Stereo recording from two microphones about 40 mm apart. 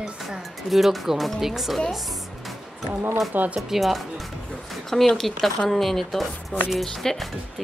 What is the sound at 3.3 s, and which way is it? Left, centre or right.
Speech, right.